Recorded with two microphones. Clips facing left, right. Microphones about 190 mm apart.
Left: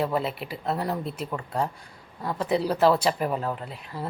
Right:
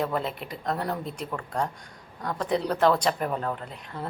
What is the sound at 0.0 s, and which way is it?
A woman's voice, 5° left (ahead or behind).